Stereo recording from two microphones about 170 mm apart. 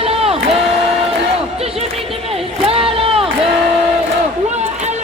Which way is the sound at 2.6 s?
35° right (ahead or behind).